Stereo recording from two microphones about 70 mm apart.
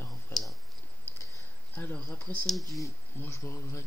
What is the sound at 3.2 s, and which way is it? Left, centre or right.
Speech, left.